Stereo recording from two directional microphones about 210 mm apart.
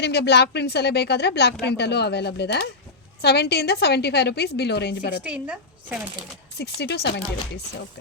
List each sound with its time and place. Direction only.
0.0 s a woman's voice: 55° left (ahead or behind)
5.2 s speech: 5° right (ahead or behind)
6.6 s a woman's voice: 50° left (ahead or behind)